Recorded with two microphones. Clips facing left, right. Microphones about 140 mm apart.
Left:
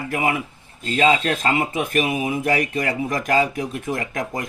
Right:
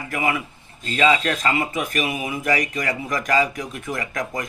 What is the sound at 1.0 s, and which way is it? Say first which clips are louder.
Speech: left 1 dB; 40° left (ahead or behind).